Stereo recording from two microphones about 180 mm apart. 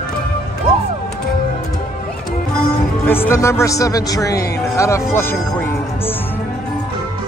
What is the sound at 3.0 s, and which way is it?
A man's voice, 10° left (ahead or behind).